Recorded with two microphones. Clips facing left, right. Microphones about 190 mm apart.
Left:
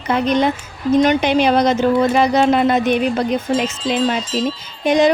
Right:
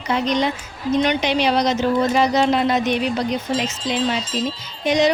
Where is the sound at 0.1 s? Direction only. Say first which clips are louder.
Left 4 dB; 55° left (ahead or behind).